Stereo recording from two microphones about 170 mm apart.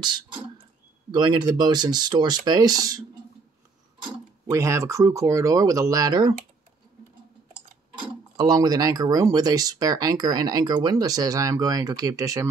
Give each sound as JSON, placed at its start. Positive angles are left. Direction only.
{"t": 1.1, "sound": "speech", "side_deg": -25}
{"t": 4.5, "sound": "speech", "side_deg": -15}
{"t": 8.4, "sound": "speech", "side_deg": -20}